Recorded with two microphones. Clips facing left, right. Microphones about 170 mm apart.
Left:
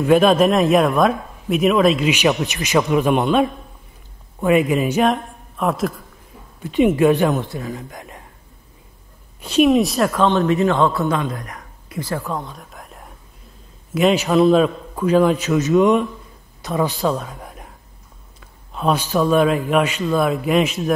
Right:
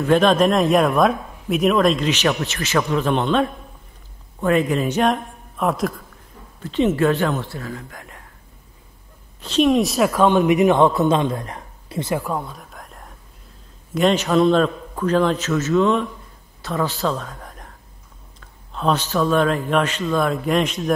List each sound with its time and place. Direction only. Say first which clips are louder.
0.0 s speech: left 2 dB; 10° left (ahead or behind)
6.6 s speech: left 3 dB; 15° left (ahead or behind)
9.4 s a man's voice: left 2 dB; 10° left (ahead or behind); by 12.2 s 25° right (ahead or behind)
12.2 s a woman's voice: right 1 dB; 10° right (ahead or behind)